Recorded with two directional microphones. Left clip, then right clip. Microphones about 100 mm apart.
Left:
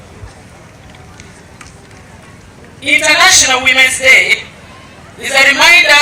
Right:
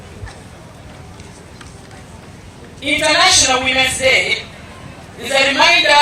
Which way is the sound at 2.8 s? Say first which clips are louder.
Left 5 dB; 40° left (ahead or behind).